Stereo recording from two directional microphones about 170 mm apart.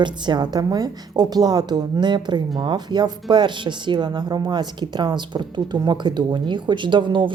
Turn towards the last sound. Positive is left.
turn(degrees=-30)  # may be behind; listen again after turning